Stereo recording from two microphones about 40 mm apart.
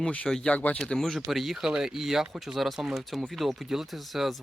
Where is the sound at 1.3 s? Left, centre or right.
Centre.